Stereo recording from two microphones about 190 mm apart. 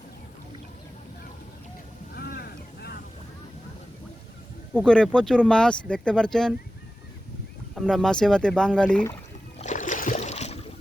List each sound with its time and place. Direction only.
2.1 s vehicle: 55° left (ahead or behind)
4.7 s speech: 5° left (ahead or behind)
7.8 s speech: centre (ahead or behind)
9.6 s a sound: 40° left (ahead or behind)